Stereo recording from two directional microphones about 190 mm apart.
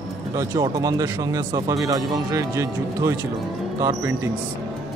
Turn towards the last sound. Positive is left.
turn(degrees=-15)  # may be behind; listen again after turning